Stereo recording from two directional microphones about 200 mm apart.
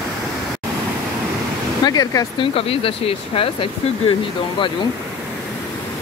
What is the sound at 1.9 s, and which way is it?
Speech, 20° left (ahead or behind).